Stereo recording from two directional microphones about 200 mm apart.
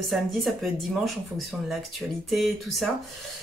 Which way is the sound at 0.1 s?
Centre (ahead or behind).